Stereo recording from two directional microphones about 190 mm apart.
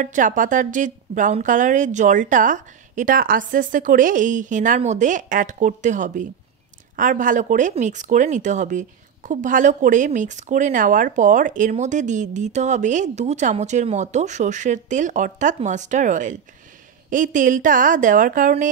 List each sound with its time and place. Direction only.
0.0 s speech: 40° right (ahead or behind)